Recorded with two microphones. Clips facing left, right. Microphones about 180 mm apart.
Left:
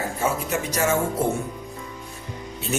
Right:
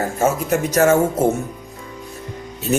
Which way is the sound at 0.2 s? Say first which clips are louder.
Right 7 dB; 45° right (ahead or behind).